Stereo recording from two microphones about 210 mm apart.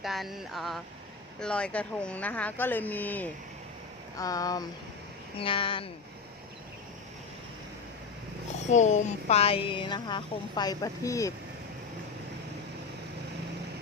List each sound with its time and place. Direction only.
0.0 s a sound: centre (ahead or behind)
1.4 s speech: 5° left (ahead or behind); by 5.9 s 25° left (ahead or behind)
8.7 s speech: 35° left (ahead or behind); by 11.3 s 15° left (ahead or behind)